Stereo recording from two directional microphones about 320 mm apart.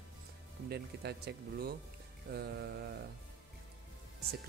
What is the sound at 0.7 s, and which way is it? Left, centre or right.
Speech, right.